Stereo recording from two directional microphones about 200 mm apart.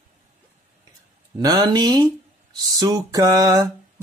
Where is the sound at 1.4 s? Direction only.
20° right (ahead or behind).